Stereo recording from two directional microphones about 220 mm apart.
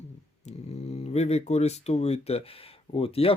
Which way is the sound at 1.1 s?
30° left (ahead or behind).